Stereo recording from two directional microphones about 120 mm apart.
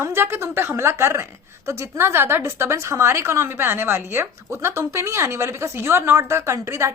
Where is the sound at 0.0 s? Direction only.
20° right (ahead or behind).